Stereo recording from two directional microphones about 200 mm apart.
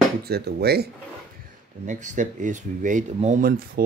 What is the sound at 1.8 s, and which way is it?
Speech, 40° right (ahead or behind).